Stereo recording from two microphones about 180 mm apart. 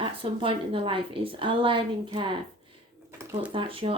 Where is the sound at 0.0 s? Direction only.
30° right (ahead or behind).